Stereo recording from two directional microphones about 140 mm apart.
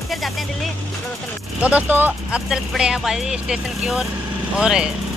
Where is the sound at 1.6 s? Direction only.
10° right (ahead or behind).